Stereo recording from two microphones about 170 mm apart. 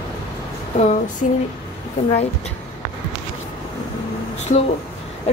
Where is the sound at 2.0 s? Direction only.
40° left (ahead or behind).